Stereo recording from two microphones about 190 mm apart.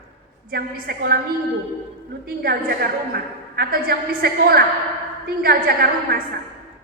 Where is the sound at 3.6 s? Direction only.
50° right (ahead or behind).